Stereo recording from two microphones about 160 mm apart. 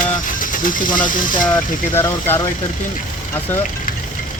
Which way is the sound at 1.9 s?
15° left (ahead or behind).